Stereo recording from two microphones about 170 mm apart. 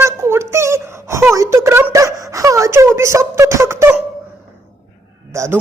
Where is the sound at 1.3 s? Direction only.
15° right (ahead or behind).